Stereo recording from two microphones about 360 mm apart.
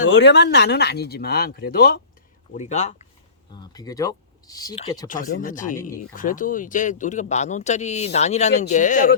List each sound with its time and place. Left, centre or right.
0.1 s speech: left